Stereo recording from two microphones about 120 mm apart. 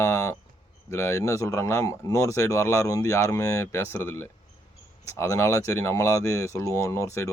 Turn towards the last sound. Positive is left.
turn(degrees=25)  # may be behind; listen again after turning